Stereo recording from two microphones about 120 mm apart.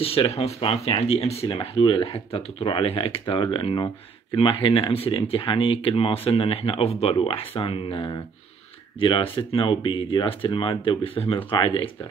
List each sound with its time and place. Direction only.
0.0 s speech: 55° left (ahead or behind)